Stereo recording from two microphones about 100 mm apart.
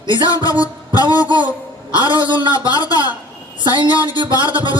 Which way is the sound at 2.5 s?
40° left (ahead or behind).